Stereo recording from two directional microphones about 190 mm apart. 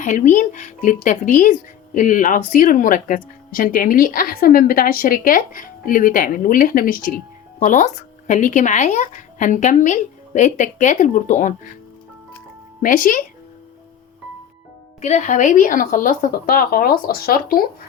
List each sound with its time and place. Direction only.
0.0 s speech: 40° left (ahead or behind)
12.8 s speech: 45° left (ahead or behind)
15.0 s speech: 40° left (ahead or behind)